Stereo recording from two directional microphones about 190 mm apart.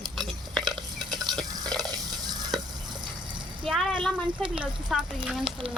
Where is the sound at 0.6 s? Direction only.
25° right (ahead or behind).